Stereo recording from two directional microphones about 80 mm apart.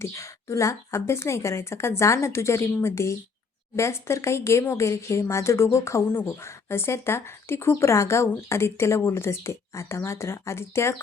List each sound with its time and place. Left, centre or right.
0.0 s speech: left